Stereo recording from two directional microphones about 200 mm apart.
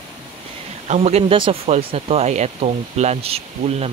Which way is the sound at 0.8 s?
35° right (ahead or behind).